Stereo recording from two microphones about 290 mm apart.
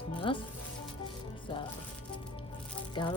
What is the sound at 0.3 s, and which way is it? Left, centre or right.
Speech, centre.